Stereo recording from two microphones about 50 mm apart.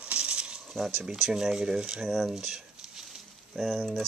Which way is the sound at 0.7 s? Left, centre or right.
Centre.